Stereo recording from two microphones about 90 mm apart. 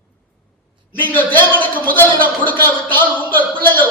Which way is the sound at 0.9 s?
20° left (ahead or behind).